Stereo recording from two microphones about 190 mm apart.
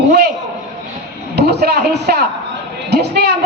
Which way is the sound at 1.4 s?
60° right (ahead or behind).